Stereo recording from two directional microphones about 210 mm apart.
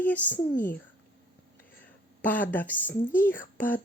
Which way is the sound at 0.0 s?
10° left (ahead or behind).